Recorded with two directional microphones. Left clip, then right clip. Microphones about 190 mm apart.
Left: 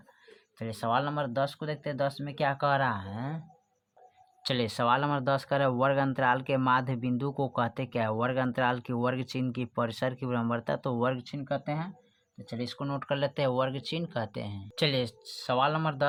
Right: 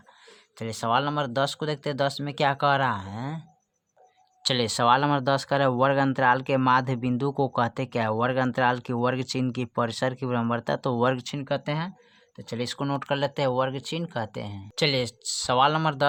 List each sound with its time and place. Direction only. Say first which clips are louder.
0.3 s speech: right 4 dB; 30° right (ahead or behind)
4.4 s speech: right 6 dB; 20° right (ahead or behind)
11.2 s speech: right 5 dB; 45° right (ahead or behind)
12.9 s speech: right 3 dB; 25° right (ahead or behind)